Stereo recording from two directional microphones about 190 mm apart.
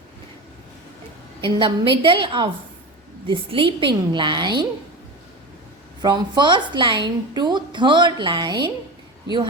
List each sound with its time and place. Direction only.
1.4 s a woman's voice: 25° right (ahead or behind)
6.0 s a woman's voice: 20° right (ahead or behind)